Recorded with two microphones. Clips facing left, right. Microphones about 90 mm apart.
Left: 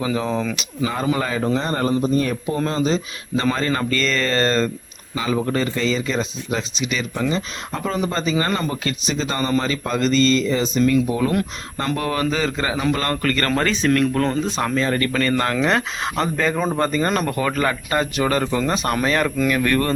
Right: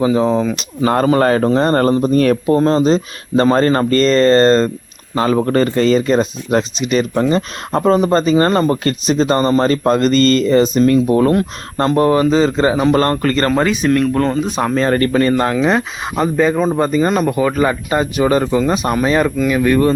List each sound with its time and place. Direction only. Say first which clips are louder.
0.0 s a man's voice: right 8 dB; 25° right (ahead or behind)
0.9 s speech: right 10 dB; 60° right (ahead or behind)
2.6 s speech: right 8 dB; 35° right (ahead or behind)
5.1 s speech: right 7 dB; 55° right (ahead or behind)
11.3 s a man's voice: right 7 dB; 40° right (ahead or behind)
13.5 s speech: right 5 dB; 10° right (ahead or behind)
14.4 s speech: right 5 dB; 15° right (ahead or behind)
14.8 s speech: right 7 dB; 40° right (ahead or behind)
15.1 s a man's voice: right 6 dB; 25° right (ahead or behind)
15.5 s a man's voice: right 5 dB; 10° right (ahead or behind)